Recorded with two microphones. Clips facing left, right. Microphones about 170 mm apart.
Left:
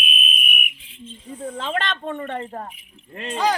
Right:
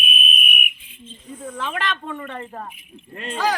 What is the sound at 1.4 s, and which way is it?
Snake, 30° left (ahead or behind).